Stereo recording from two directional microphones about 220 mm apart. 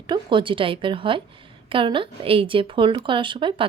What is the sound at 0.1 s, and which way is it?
A woman's voice, 20° right (ahead or behind).